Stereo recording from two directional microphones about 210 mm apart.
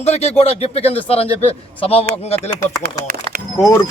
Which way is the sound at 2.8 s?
45° right (ahead or behind).